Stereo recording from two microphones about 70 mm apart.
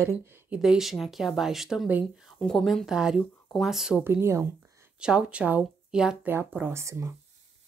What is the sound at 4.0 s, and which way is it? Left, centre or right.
Speech, right.